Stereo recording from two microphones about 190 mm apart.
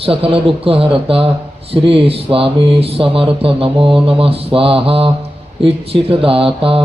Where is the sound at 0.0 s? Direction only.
30° right (ahead or behind).